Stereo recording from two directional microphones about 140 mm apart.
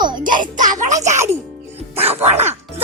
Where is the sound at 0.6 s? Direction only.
65° right (ahead or behind).